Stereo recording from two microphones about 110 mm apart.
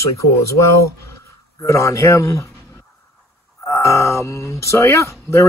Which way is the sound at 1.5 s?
30° left (ahead or behind).